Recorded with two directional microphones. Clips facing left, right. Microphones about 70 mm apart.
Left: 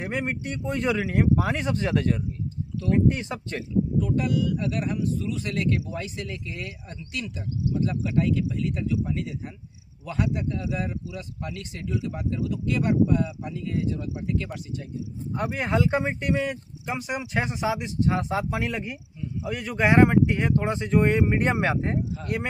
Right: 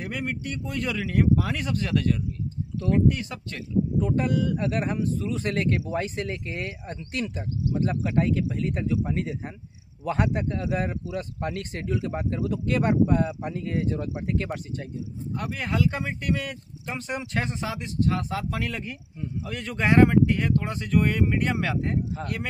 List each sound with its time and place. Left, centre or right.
0.0 s speech: left
4.0 s speech: right
15.3 s speech: left